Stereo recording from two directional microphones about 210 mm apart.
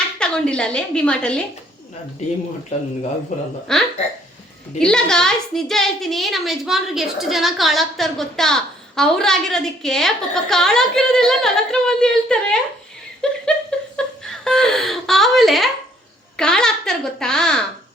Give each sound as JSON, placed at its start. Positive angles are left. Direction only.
{"t": 0.2, "sound": "a woman's voice", "side_deg": 5}
{"t": 3.3, "sound": "speech", "side_deg": 35}
{"t": 3.7, "sound": "a woman's voice", "side_deg": 5}
{"t": 13.4, "sound": "laughter", "side_deg": 5}
{"t": 16.4, "sound": "a woman's voice", "side_deg": 5}